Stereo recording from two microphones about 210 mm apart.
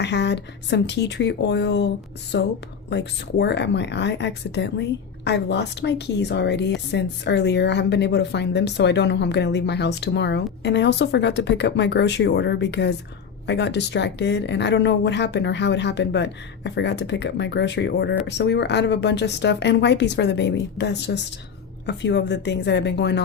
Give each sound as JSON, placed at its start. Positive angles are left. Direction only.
{"t": 0.0, "sound": "speech", "side_deg": 55}